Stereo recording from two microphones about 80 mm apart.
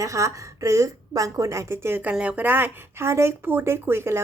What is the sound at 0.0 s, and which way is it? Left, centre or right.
A woman's voice, right.